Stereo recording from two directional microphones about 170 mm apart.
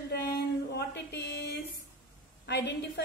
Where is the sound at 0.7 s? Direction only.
75° left (ahead or behind).